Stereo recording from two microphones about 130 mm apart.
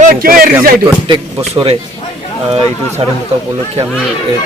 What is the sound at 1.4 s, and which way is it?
Speech, 45° right (ahead or behind).